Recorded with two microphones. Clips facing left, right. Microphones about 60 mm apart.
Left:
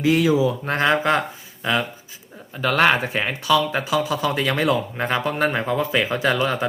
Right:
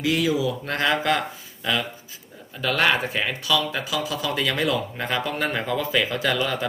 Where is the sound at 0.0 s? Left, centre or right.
Left.